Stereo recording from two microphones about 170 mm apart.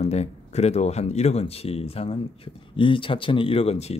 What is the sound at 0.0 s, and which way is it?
Speech, 40° left (ahead or behind).